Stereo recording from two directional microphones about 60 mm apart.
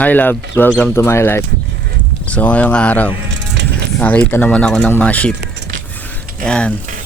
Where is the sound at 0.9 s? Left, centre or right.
Left.